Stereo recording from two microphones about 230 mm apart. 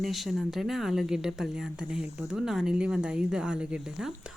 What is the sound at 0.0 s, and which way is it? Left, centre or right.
Speech, centre.